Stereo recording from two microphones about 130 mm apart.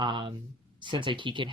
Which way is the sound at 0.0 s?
35° right (ahead or behind).